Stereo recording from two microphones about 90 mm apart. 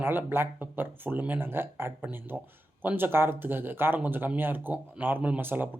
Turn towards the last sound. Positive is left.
turn(degrees=-20)  # may be behind; listen again after turning